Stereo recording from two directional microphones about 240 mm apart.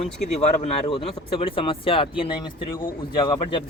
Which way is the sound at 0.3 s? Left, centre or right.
Left.